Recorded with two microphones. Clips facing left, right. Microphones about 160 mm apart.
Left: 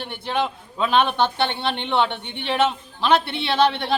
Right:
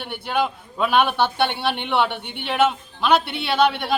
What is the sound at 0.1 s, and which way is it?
A man's voice, 5° right (ahead or behind).